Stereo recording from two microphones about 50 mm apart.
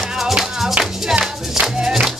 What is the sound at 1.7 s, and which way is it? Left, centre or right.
Music, centre.